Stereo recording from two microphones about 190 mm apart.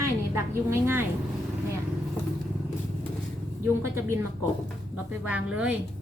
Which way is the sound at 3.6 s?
15° right (ahead or behind).